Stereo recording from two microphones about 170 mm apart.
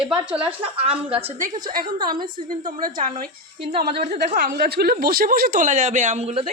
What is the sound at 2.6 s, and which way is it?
Speech, 55° right (ahead or behind).